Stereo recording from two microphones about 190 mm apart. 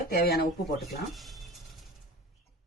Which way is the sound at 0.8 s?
Centre (ahead or behind).